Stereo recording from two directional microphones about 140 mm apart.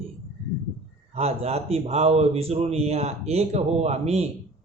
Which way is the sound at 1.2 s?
50° right (ahead or behind).